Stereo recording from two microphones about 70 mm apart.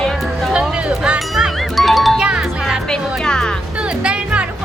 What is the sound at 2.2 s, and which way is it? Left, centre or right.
Music, centre.